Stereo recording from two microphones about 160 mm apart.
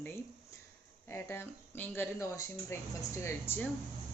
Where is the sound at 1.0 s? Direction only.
15° left (ahead or behind).